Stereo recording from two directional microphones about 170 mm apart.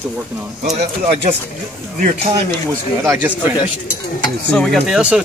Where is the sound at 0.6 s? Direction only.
40° right (ahead or behind).